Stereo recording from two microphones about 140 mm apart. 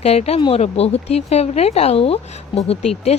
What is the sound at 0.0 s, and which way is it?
Speech, 45° left (ahead or behind).